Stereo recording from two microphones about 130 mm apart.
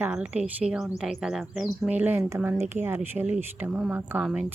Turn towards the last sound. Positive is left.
turn(degrees=-10)  # may be behind; listen again after turning